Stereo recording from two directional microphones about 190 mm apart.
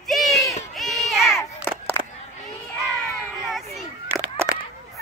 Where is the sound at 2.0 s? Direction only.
30° right (ahead or behind).